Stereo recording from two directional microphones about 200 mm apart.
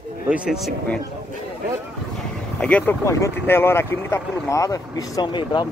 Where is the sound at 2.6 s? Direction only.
10° left (ahead or behind).